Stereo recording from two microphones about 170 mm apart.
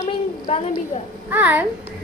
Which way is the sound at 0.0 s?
40° left (ahead or behind).